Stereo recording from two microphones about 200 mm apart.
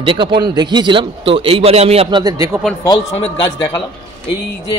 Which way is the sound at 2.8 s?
20° left (ahead or behind).